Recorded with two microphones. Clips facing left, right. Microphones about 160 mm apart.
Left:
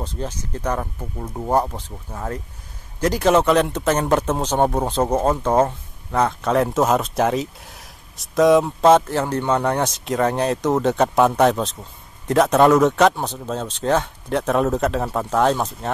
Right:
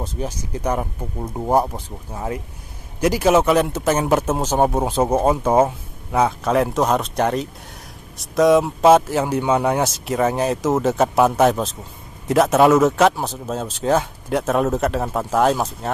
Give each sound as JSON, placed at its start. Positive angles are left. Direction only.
{"t": 0.0, "sound": "speech", "side_deg": -10}